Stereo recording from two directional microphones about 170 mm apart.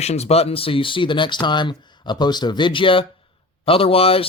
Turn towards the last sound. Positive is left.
turn(degrees=35)  # may be behind; listen again after turning